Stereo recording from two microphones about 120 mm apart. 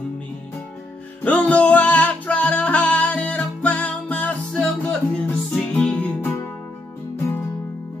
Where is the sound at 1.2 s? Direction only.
10° left (ahead or behind).